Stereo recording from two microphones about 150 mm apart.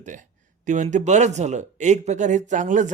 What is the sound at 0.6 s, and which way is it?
A man's voice, 55° right (ahead or behind).